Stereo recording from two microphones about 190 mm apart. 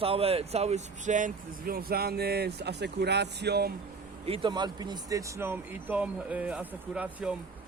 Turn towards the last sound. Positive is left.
turn(degrees=-5)  # may be behind; listen again after turning